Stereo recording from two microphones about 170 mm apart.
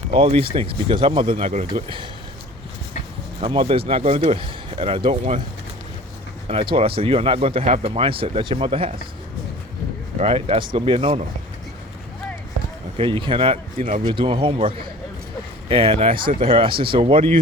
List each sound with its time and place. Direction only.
0.1 s speech: 35° right (ahead or behind)
1.5 s speech: 45° right (ahead or behind)
3.4 s speech: 30° right (ahead or behind)
6.5 s speech: 35° right (ahead or behind)
10.2 s speech: 35° right (ahead or behind)
13.0 s a man's voice: 30° right (ahead or behind)